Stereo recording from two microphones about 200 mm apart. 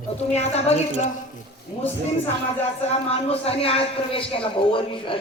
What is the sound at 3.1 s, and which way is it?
Speech, 30° left (ahead or behind).